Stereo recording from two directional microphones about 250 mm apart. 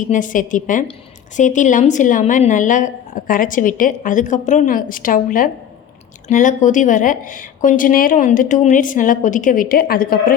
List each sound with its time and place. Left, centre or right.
0.0 s a woman's voice: left